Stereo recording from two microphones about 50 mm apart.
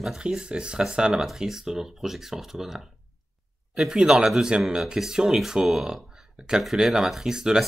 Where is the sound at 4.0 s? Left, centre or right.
Centre.